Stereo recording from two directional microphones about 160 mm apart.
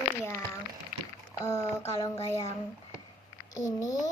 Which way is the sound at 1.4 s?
20° left (ahead or behind).